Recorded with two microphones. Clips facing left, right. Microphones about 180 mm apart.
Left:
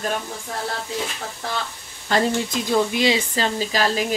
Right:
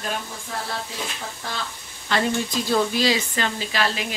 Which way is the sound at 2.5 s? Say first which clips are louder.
Left 1 dB; 20° left (ahead or behind).